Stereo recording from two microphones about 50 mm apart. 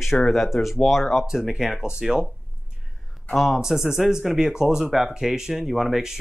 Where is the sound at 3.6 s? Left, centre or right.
Centre.